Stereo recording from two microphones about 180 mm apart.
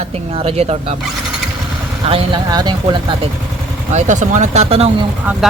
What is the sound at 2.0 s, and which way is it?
Speech, 30° right (ahead or behind).